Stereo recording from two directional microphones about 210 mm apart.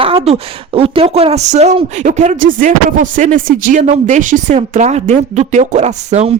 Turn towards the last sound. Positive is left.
turn(degrees=-30)  # may be behind; listen again after turning